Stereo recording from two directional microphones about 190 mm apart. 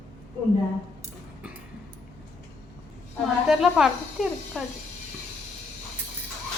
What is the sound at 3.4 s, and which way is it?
Speech, 5° right (ahead or behind).